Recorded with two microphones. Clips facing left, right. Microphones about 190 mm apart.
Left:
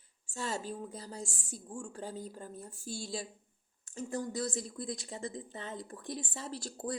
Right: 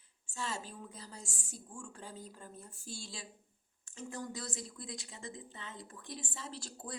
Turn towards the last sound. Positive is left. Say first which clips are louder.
# left 7 dB
turn(degrees=35)  # may be behind; listen again after turning